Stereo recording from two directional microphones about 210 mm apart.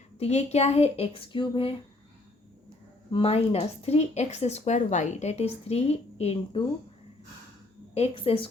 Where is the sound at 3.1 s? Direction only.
25° left (ahead or behind).